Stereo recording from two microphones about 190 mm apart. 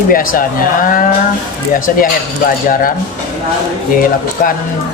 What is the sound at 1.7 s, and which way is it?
Speech, 45° left (ahead or behind).